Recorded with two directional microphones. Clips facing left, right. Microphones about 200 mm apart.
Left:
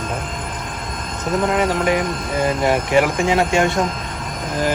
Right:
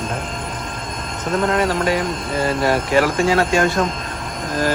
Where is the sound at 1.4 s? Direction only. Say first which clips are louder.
Even; 15° left (ahead or behind).